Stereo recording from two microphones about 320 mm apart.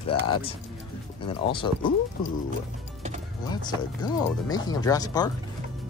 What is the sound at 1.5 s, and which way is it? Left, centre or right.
Speech, centre.